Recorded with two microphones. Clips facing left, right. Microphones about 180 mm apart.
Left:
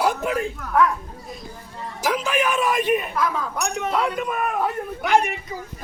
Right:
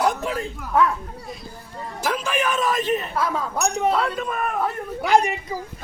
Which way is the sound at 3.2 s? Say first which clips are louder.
Right 1 dB; 25° right (ahead or behind).